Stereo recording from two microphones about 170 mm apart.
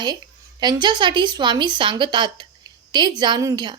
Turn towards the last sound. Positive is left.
turn(degrees=-20)  # may be behind; listen again after turning